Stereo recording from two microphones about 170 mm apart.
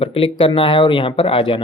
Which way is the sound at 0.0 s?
30° left (ahead or behind).